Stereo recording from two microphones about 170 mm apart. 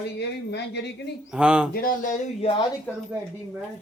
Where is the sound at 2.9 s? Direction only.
10° left (ahead or behind).